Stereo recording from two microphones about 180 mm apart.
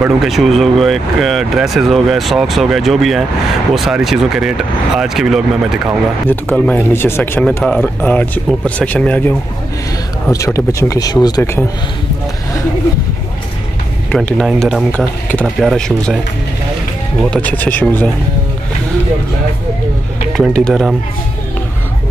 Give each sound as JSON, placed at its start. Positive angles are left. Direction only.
{"t": 0.0, "sound": "speech", "side_deg": 0}
{"t": 6.5, "sound": "speech", "side_deg": 5}
{"t": 14.1, "sound": "speech", "side_deg": 5}
{"t": 17.3, "sound": "speech", "side_deg": 10}
{"t": 20.3, "sound": "speech", "side_deg": 5}